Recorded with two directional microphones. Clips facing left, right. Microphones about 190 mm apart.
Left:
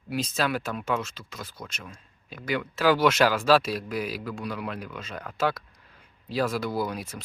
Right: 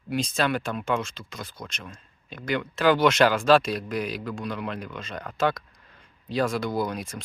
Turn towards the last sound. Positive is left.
turn(degrees=5)  # may be behind; listen again after turning